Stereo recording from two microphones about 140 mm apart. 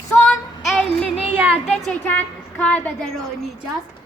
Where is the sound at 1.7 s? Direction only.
Centre (ahead or behind).